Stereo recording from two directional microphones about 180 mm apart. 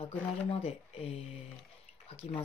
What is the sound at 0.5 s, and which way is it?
Speech, 35° left (ahead or behind).